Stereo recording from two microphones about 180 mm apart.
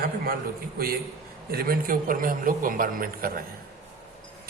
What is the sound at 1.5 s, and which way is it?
A man's voice, 55° right (ahead or behind).